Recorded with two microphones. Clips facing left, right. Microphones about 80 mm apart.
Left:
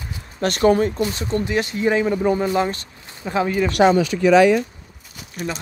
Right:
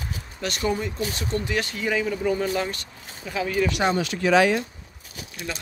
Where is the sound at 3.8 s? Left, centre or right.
Left.